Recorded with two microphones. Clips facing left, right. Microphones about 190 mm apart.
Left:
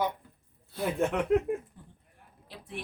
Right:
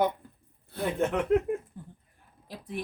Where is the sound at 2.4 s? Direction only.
40° right (ahead or behind).